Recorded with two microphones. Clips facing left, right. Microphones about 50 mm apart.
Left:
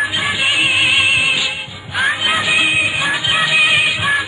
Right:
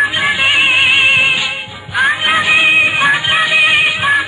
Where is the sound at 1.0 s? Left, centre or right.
Right.